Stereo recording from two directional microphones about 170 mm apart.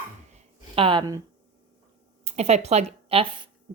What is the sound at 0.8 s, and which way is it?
Speech, 30° right (ahead or behind).